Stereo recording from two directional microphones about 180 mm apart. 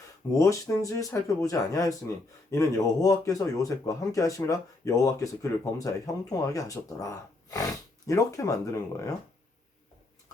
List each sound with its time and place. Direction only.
0.3 s speech: 15° left (ahead or behind)